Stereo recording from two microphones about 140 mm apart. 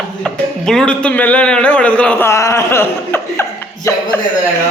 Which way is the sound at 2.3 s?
20° left (ahead or behind).